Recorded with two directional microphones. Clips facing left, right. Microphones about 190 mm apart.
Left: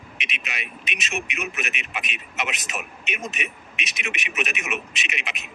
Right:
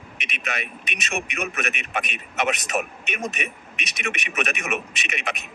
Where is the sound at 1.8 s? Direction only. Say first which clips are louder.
Right 4 dB; 55° right (ahead or behind).